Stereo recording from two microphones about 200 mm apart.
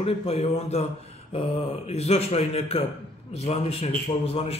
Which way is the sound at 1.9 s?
30° left (ahead or behind).